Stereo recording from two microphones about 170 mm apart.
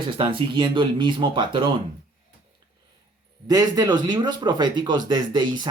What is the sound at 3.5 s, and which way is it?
Speech, 25° right (ahead or behind).